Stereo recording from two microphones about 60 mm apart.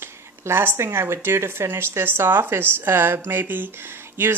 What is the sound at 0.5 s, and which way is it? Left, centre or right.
A woman's voice, right.